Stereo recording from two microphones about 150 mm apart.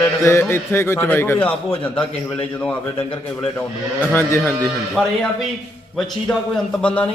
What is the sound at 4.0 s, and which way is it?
Speech, 15° left (ahead or behind).